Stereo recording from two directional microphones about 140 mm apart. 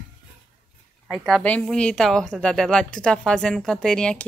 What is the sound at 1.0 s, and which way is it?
A woman's voice, centre (ahead or behind).